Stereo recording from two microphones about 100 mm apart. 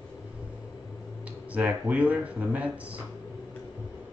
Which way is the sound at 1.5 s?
15° right (ahead or behind).